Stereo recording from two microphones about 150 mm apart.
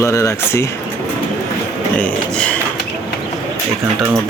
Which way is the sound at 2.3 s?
5° left (ahead or behind).